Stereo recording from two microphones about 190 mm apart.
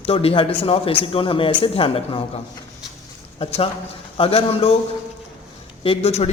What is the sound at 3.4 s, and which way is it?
Speech, 30° left (ahead or behind).